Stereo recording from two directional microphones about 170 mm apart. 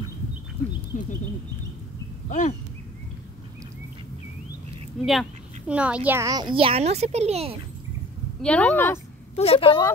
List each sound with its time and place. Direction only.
0.9 s a sound: 50° left (ahead or behind)
2.2 s speech: 45° left (ahead or behind)
5.0 s a child's voice: centre (ahead or behind); by 7.5 s 35° right (ahead or behind)
8.4 s speech: 5° left (ahead or behind)
9.3 s a woman's voice: 35° left (ahead or behind)